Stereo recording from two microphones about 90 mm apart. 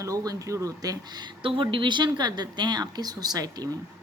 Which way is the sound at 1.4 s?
75° right (ahead or behind).